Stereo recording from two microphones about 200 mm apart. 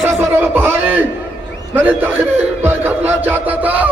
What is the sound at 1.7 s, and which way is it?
Crowd, 10° right (ahead or behind).